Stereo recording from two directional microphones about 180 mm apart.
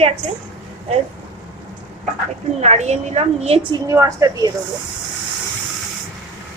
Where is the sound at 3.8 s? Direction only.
20° right (ahead or behind).